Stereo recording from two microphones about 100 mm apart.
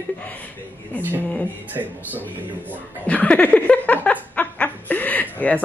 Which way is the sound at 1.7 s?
20° right (ahead or behind).